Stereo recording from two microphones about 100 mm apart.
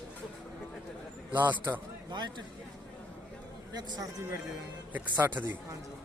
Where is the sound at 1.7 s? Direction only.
45° right (ahead or behind).